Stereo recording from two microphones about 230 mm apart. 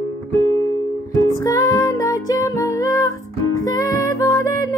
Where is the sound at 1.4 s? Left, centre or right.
Centre.